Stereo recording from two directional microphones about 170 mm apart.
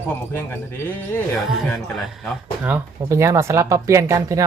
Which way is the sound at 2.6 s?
15° right (ahead or behind).